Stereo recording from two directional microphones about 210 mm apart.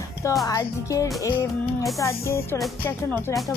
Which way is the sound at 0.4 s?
15° left (ahead or behind).